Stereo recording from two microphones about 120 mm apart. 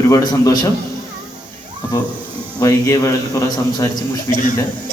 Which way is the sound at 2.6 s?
25° left (ahead or behind).